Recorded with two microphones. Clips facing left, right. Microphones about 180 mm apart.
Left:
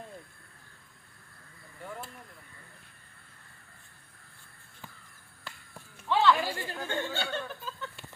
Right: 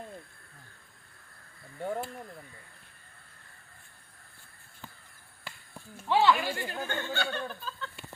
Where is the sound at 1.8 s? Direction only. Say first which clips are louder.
Right 9 dB; 35° right (ahead or behind).